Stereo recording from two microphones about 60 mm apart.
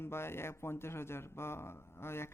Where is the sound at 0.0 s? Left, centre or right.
Left.